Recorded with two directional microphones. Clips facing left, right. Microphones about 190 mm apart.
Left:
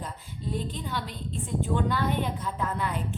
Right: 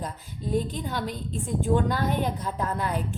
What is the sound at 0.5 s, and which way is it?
A woman's voice, 45° right (ahead or behind).